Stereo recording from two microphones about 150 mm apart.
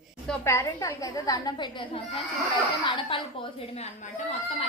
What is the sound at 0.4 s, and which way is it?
Speech, 20° left (ahead or behind).